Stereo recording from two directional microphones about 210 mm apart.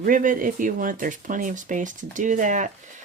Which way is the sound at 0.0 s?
40° right (ahead or behind).